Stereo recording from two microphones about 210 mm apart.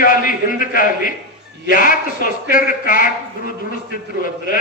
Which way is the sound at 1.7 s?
40° left (ahead or behind).